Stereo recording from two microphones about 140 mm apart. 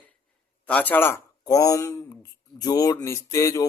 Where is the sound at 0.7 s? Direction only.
10° left (ahead or behind).